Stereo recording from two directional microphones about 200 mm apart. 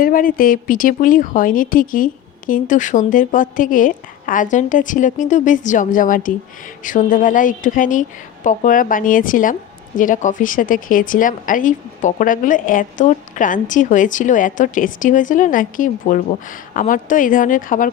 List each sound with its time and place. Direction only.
0.0 s a woman's voice: 45° left (ahead or behind)